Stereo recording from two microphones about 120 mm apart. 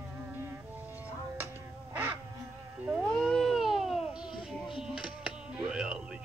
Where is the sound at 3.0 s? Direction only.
5° left (ahead or behind).